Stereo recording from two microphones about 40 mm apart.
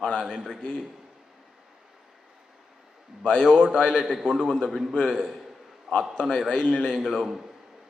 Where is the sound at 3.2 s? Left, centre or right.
Left.